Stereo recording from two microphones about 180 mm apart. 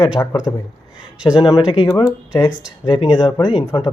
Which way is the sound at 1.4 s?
25° left (ahead or behind).